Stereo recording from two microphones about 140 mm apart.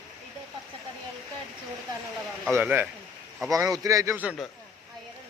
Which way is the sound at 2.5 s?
15° right (ahead or behind).